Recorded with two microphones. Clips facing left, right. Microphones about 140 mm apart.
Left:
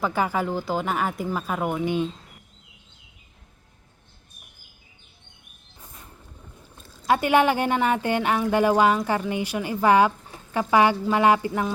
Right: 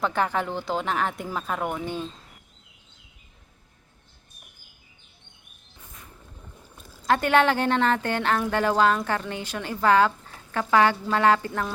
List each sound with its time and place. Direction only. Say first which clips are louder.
0.0 s speech: left 1 dB; 5° left (ahead or behind)
7.1 s speech: left 1 dB; 10° left (ahead or behind)